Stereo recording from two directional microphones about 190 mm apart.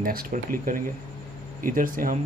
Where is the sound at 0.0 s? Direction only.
50° right (ahead or behind).